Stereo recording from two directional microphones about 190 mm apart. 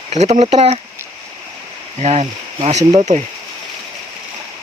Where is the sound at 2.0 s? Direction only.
35° right (ahead or behind).